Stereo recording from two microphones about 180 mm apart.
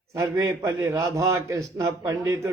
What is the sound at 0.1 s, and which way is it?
A man's voice, 20° right (ahead or behind).